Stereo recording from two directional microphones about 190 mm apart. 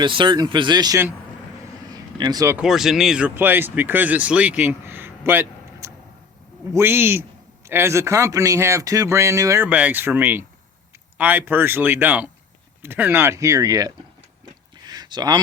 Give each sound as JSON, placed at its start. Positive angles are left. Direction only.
{"t": 0.0, "sound": "speech", "side_deg": -25}
{"t": 1.9, "sound": "vehicle", "side_deg": -20}
{"t": 2.6, "sound": "a man's voice", "side_deg": 0}
{"t": 14.8, "sound": "a sound", "side_deg": -20}